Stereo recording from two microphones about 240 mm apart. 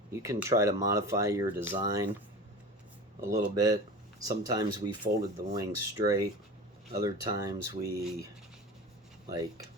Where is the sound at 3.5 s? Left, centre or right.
Centre.